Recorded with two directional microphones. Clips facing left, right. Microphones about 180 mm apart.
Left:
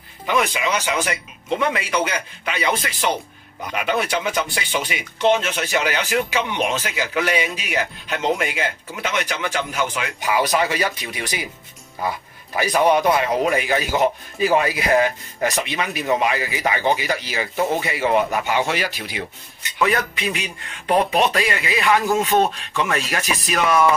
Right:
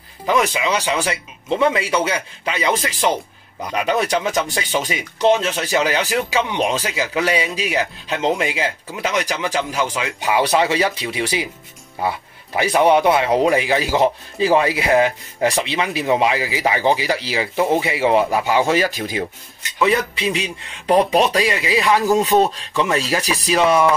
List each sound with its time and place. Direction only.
0.3 s speech: 35° right (ahead or behind)
12.5 s speech: 25° right (ahead or behind); by 19.2 s 45° right (ahead or behind)
19.8 s speech: 30° right (ahead or behind)